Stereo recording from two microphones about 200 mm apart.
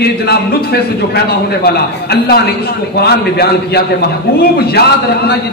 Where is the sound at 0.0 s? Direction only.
50° left (ahead or behind).